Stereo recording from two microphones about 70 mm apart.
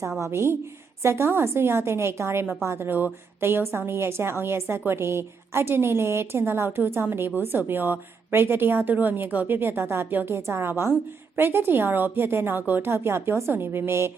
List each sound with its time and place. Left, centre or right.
0.2 s a woman's voice: right